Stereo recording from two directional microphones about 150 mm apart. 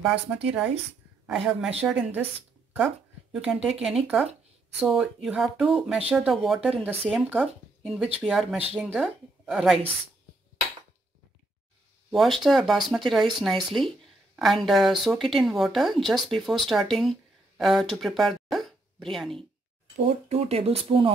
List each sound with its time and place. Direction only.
0.0 s a woman's voice: 10° right (ahead or behind)
3.8 s a woman's voice: 5° right (ahead or behind)
12.1 s a woman's voice: centre (ahead or behind)
20.2 s speech: 45° right (ahead or behind)